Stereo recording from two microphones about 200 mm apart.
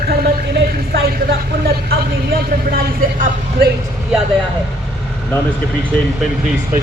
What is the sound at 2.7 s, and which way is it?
Speech, 45° right (ahead or behind).